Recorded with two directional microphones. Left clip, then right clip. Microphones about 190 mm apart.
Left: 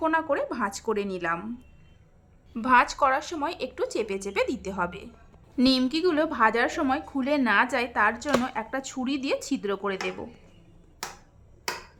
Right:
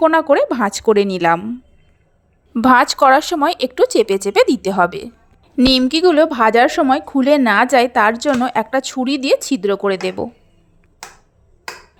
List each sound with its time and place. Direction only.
0.0 s a woman's voice: 40° right (ahead or behind)
2.6 s speech: 45° right (ahead or behind)
5.6 s a woman's voice: 25° right (ahead or behind)
5.9 s a woman's voice: 35° right (ahead or behind)